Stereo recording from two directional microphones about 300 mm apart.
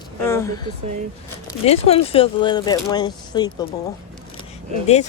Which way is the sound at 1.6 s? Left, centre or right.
Centre.